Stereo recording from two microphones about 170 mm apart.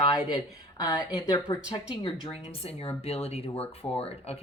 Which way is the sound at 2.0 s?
30° left (ahead or behind).